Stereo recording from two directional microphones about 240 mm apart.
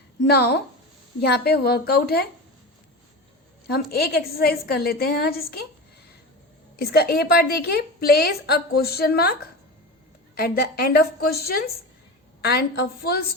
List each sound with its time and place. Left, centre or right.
0.3 s a woman's voice: left
3.7 s a woman's voice: left
6.7 s a woman's voice: left
10.3 s a woman's voice: left